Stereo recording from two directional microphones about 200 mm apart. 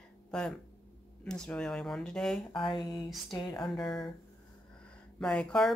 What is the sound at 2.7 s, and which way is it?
Speech, 20° left (ahead or behind).